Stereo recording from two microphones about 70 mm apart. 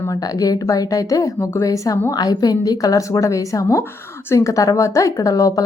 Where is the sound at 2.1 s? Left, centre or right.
Left.